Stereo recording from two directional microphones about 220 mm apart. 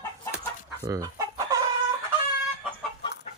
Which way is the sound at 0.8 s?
15° right (ahead or behind).